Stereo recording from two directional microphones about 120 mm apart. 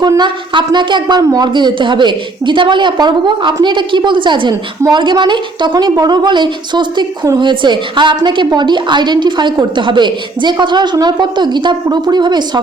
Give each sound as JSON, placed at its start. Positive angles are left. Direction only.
{"t": 0.2, "sound": "a woman's voice", "side_deg": -40}